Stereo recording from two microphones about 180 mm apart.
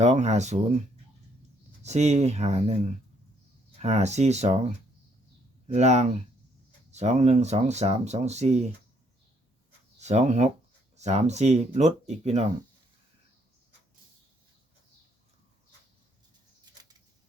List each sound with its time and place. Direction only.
0.0 s speech: 40° right (ahead or behind)
1.8 s speech: 40° right (ahead or behind)
3.8 s speech: 40° right (ahead or behind)
10.0 s speech: 40° right (ahead or behind)